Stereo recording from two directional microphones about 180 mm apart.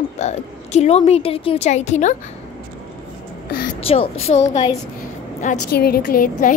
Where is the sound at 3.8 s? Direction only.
30° left (ahead or behind).